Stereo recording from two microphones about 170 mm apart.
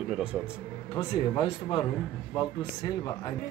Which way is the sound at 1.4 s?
30° left (ahead or behind).